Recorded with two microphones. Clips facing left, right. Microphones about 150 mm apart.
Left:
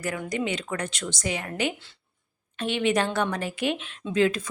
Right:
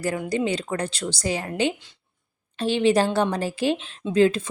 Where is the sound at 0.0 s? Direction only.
30° right (ahead or behind).